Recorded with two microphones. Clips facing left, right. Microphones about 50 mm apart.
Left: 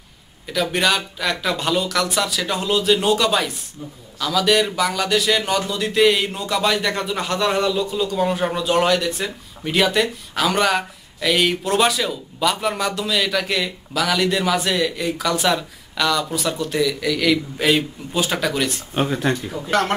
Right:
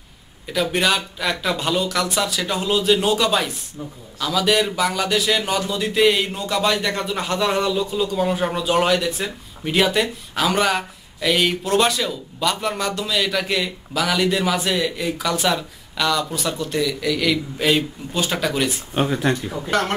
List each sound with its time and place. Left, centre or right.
0.5 s speech: centre